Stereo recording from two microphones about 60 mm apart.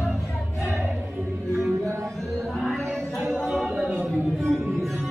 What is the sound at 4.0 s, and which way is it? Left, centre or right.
Music, centre.